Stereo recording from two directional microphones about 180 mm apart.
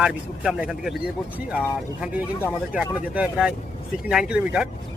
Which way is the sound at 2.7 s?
5° right (ahead or behind).